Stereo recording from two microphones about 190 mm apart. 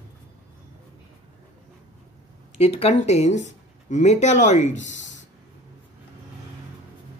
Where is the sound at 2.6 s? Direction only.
35° left (ahead or behind).